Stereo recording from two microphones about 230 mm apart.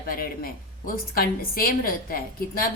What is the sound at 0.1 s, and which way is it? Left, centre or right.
A woman's voice, left.